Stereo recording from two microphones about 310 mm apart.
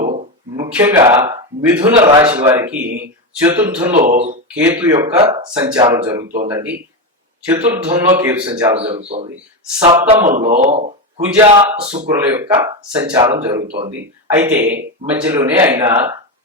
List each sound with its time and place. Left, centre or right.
0.5 s speech: centre
3.9 s a man's voice: right
4.4 s speech: centre
9.0 s a man's voice: right
10.2 s a man's voice: right; by 13.7 s centre
13.7 s a man's voice: right
14.3 s speech: centre